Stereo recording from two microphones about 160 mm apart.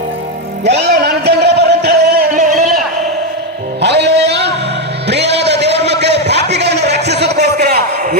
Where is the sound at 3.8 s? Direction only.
90° right.